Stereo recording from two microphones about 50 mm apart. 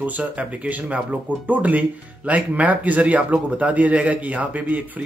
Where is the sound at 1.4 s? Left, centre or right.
Right.